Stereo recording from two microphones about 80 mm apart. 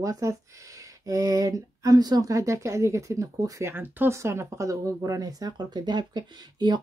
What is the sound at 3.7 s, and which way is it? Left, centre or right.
Speech, right.